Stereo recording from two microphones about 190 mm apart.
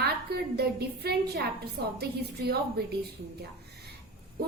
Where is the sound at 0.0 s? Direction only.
55° right (ahead or behind).